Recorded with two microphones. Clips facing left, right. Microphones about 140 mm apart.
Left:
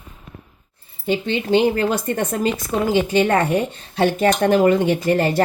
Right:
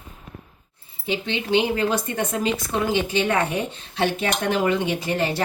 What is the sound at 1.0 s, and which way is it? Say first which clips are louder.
Speech: left 5 dB; 45° left (ahead or behind).